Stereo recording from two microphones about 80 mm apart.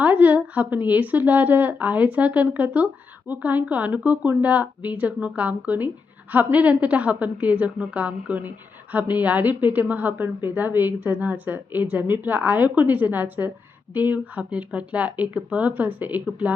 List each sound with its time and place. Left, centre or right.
0.0 s a woman's voice: centre